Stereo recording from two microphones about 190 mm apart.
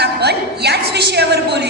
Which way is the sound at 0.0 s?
60° right (ahead or behind).